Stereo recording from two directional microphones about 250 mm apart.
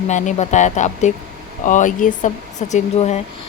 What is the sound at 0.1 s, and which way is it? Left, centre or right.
Speech, left.